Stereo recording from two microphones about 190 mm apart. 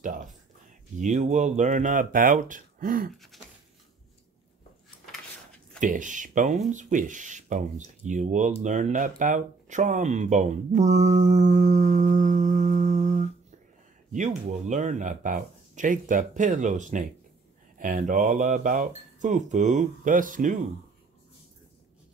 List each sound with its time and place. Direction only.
0.9 s speech: 40° right (ahead or behind)
3.3 s a sound: centre (ahead or behind)
5.8 s speech: 45° right (ahead or behind)